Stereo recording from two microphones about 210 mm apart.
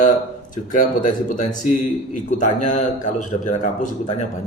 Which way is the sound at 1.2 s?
40° left (ahead or behind).